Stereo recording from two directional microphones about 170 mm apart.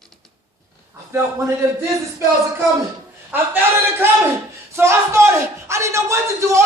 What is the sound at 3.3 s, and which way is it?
Speech, 10° right (ahead or behind).